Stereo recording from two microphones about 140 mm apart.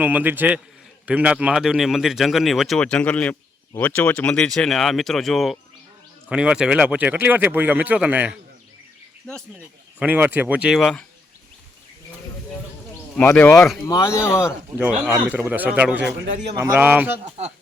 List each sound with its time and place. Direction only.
0.0 s speech: 10° right (ahead or behind)
10.0 s speech: 10° right (ahead or behind)
10.8 s speech: 5° left (ahead or behind)
13.3 s speech: 5° left (ahead or behind)
13.8 s speech: 20° left (ahead or behind)
15.0 s speech: 5° right (ahead or behind)